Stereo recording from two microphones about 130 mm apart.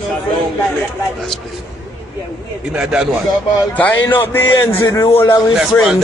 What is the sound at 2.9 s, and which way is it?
Speech, 5° right (ahead or behind).